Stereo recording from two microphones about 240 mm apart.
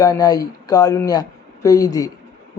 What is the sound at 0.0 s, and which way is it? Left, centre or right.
Speech, centre.